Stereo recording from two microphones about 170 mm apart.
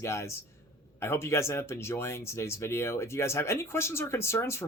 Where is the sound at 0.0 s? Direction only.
15° left (ahead or behind).